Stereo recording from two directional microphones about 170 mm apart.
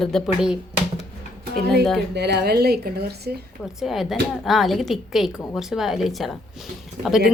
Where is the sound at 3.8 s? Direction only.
Centre (ahead or behind).